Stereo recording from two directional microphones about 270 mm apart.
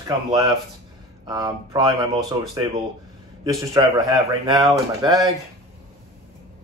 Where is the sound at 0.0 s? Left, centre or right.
Centre.